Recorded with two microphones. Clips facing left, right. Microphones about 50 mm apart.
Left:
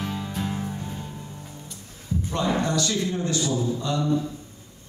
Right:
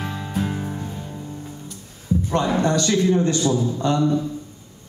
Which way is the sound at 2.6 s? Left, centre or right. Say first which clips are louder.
Right 6 dB; right.